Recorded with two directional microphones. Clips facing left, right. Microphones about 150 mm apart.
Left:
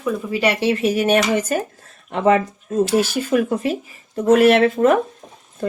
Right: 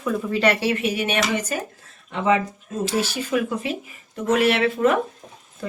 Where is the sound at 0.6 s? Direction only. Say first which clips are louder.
Left 5 dB; 30° left (ahead or behind).